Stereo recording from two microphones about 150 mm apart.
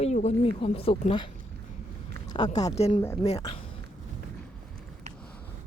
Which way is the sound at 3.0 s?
15° left (ahead or behind).